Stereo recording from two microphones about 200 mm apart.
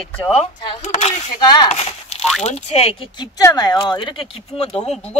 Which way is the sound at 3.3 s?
20° left (ahead or behind).